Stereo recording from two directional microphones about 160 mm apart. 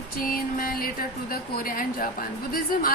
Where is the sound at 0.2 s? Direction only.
60° left (ahead or behind).